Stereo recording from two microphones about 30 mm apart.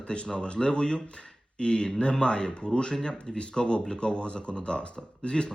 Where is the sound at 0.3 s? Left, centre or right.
Left.